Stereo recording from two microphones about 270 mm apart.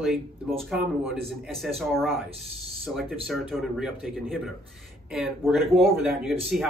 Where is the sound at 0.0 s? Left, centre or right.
Centre.